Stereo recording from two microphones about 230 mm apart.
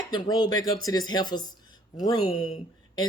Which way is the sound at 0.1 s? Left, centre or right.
Centre.